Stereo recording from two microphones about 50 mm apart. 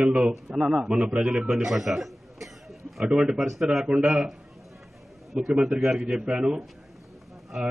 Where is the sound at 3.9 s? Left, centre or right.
Right.